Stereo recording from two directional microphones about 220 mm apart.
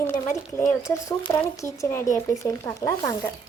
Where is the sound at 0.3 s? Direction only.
30° left (ahead or behind).